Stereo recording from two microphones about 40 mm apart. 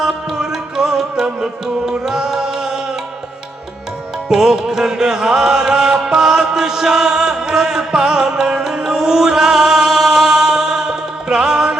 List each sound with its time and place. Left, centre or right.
0.0 s music: centre
4.3 s music: centre